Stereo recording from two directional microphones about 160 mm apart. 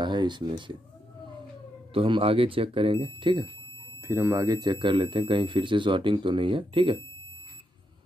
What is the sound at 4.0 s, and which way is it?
Speech, 15° right (ahead or behind).